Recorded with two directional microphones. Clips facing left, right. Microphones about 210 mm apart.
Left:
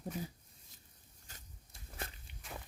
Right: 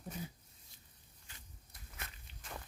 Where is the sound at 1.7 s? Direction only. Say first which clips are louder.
Left 6 dB; 30° left (ahead or behind).